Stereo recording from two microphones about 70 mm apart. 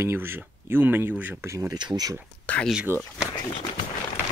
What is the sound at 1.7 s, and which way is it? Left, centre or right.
Speech, right.